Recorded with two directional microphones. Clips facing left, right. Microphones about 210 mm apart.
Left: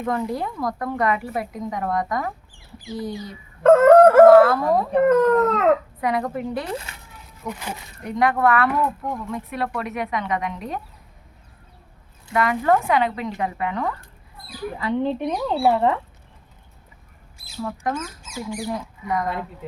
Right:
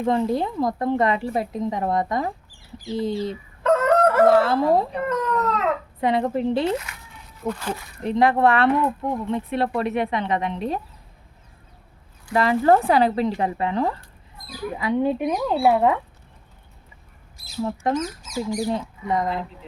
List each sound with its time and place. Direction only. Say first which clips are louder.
0.0 s speech: right 4 dB; 25° right (ahead or behind)
2.5 s chicken: right 4 dB; 40° right (ahead or behind)
2.9 s speech: right 5 dB; 25° right (ahead or behind)
3.6 s crowing: left 7 dB; 50° left (ahead or behind)
4.3 s speech: left 4 dB; 25° right (ahead or behind)
4.9 s speech: left 9 dB; 50° left (ahead or behind)
6.0 s speech: right 3 dB; 25° right (ahead or behind)
12.3 s speech: right 2 dB; 30° right (ahead or behind)
14.8 s speech: right 2 dB; 10° right (ahead or behind)
17.6 s speech: right 4 dB; 25° right (ahead or behind)